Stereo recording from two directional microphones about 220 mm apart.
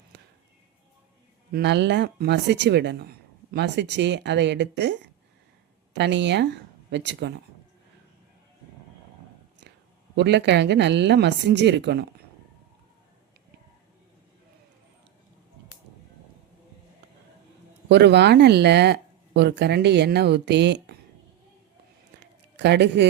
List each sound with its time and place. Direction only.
0.1 s music: 50° right (ahead or behind)
1.5 s a woman's voice: 50° right (ahead or behind)
10.2 s a woman's voice: 50° right (ahead or behind)
17.8 s a woman's voice: 50° right (ahead or behind)
22.2 s a sound: 50° right (ahead or behind)